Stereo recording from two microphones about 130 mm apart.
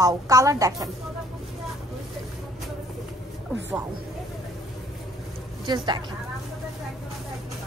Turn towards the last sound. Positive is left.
turn(degrees=-35)  # may be behind; listen again after turning